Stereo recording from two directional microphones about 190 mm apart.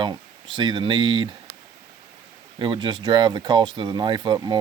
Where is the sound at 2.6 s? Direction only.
25° right (ahead or behind).